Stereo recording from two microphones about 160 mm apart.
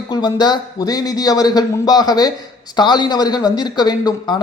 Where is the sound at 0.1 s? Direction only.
25° left (ahead or behind).